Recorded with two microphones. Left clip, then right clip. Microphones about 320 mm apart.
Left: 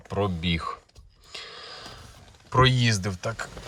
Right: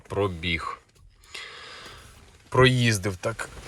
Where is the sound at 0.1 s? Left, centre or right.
Centre.